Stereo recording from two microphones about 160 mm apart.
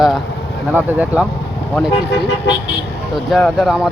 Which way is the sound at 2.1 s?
90° left.